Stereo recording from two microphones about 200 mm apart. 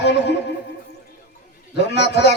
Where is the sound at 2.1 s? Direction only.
60° left (ahead or behind).